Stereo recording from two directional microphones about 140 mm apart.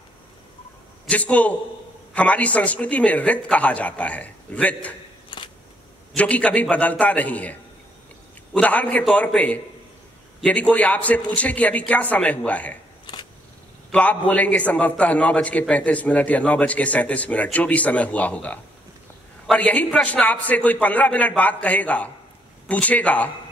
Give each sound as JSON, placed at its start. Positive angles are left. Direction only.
{"t": 1.0, "sound": "a man's voice", "side_deg": 10}
{"t": 5.3, "sound": "a sound", "side_deg": 35}
{"t": 6.1, "sound": "a man's voice", "side_deg": 10}
{"t": 8.5, "sound": "a man's voice", "side_deg": 10}
{"t": 13.0, "sound": "camera", "side_deg": 30}
{"t": 13.9, "sound": "a man's voice", "side_deg": 10}